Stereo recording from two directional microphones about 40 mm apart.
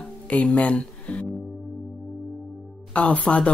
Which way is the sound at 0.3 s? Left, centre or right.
Left.